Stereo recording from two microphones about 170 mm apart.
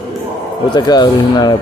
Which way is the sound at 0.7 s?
25° left (ahead or behind).